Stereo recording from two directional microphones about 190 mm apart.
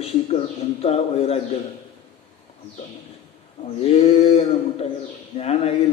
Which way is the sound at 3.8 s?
35° left (ahead or behind).